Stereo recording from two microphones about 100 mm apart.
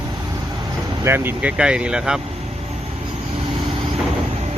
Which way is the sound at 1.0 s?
20° right (ahead or behind).